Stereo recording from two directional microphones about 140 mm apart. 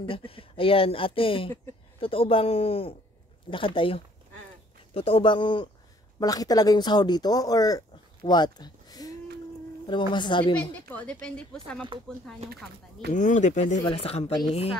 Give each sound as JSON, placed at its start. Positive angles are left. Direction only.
{"t": 0.0, "sound": "speech", "side_deg": 40}
{"t": 8.2, "sound": "a sound", "side_deg": 30}
{"t": 9.8, "sound": "speech", "side_deg": 35}
{"t": 10.7, "sound": "a woman's voice", "side_deg": 10}
{"t": 13.1, "sound": "speech", "side_deg": 65}
{"t": 13.8, "sound": "speech", "side_deg": 45}